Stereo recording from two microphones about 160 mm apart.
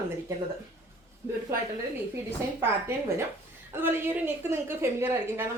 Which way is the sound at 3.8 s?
15° right (ahead or behind).